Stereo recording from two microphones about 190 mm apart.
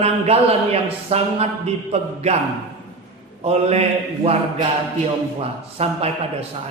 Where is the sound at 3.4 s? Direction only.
35° right (ahead or behind).